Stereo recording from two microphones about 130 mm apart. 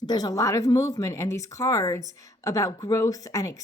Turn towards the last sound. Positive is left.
turn(degrees=25)  # may be behind; listen again after turning